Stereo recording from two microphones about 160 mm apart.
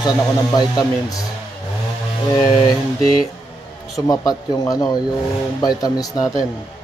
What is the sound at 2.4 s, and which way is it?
Speech, 25° left (ahead or behind).